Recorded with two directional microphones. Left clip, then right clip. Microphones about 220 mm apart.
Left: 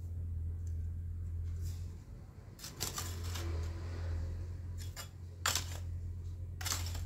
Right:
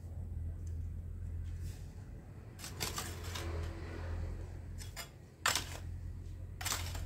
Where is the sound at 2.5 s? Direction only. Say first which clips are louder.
Right 1 dB; 15° left (ahead or behind).